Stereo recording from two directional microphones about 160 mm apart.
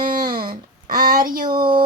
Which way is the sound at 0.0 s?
65° right (ahead or behind).